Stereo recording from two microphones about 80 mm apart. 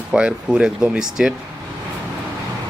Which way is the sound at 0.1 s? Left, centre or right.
Centre.